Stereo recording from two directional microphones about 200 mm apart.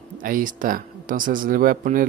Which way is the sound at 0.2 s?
45° right (ahead or behind).